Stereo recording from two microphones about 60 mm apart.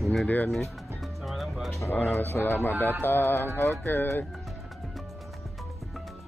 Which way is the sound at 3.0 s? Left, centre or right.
Left.